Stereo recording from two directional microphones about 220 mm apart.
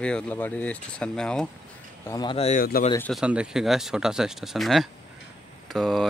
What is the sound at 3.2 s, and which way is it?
Speech, 5° right (ahead or behind).